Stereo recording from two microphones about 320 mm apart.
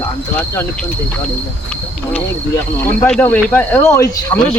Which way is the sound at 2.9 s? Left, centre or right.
Centre.